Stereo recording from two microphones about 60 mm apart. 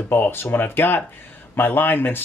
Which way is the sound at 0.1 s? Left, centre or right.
Left.